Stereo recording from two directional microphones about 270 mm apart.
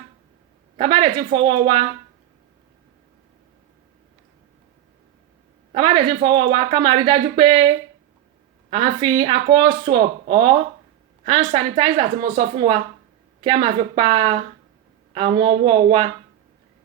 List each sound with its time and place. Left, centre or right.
0.8 s speech: centre
5.7 s speech: centre
8.7 s speech: centre